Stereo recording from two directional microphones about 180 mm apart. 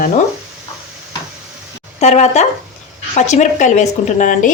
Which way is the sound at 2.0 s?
40° left (ahead or behind).